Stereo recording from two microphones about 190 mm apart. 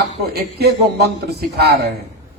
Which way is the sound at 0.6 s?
60° right (ahead or behind).